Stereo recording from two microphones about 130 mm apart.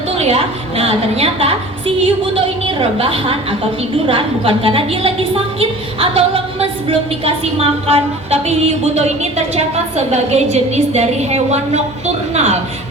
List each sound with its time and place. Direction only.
0.2 s a woman's voice: 55° right (ahead or behind)